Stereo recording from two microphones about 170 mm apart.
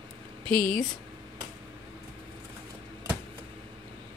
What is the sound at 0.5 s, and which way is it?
Speech, 55° left (ahead or behind).